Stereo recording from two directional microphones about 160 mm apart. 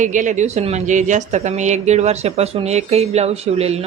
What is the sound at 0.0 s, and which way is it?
A woman's voice, 50° right (ahead or behind).